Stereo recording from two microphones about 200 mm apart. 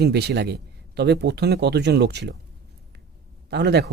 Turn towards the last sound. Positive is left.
turn(degrees=-55)  # may be behind; listen again after turning